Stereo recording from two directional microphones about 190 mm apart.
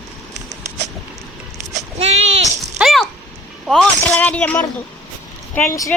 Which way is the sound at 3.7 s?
5° left (ahead or behind).